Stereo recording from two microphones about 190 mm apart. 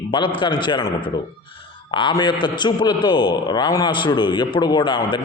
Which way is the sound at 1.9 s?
25° left (ahead or behind).